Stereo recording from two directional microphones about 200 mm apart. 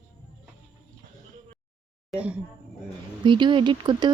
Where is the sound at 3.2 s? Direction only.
25° right (ahead or behind).